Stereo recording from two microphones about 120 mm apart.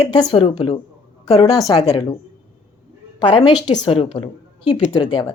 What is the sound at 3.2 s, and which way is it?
Speech, 50° left (ahead or behind).